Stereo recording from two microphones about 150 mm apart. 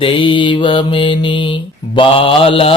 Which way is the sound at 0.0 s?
35° left (ahead or behind).